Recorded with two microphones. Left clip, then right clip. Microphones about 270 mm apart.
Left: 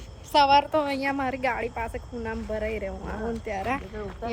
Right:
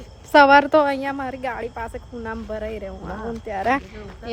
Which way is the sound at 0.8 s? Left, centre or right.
Centre.